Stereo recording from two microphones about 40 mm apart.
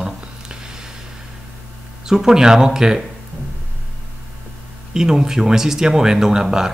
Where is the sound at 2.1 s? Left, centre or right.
Centre.